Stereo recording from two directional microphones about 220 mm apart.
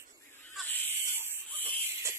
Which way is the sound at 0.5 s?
10° left (ahead or behind).